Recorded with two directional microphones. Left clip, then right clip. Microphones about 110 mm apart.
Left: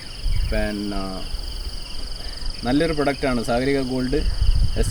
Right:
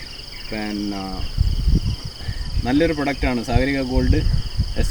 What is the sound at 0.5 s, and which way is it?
Speech, 25° left (ahead or behind).